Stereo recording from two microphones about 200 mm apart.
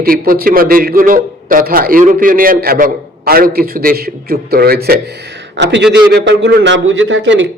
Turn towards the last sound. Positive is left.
turn(degrees=-65)  # may be behind; listen again after turning